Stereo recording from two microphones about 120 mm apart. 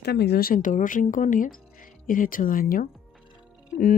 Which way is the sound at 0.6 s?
90° left.